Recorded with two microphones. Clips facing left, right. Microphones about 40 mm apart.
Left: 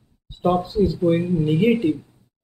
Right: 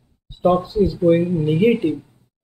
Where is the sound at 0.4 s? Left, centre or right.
Centre.